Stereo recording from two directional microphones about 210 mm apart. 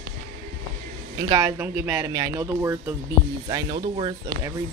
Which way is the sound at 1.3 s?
10° right (ahead or behind).